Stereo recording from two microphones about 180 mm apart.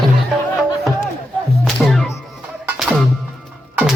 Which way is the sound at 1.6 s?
Centre (ahead or behind).